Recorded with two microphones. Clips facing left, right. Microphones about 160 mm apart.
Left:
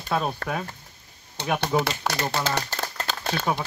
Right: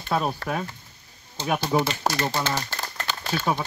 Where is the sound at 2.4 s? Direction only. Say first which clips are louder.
Left 1 dB; 40° left (ahead or behind).